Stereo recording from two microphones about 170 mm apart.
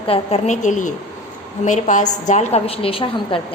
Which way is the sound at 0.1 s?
40° left (ahead or behind).